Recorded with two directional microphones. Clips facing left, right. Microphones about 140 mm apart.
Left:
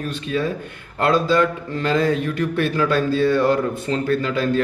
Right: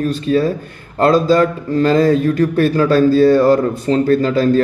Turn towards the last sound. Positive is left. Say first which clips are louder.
# right 7 dB
turn(degrees=-40)  # may be behind; listen again after turning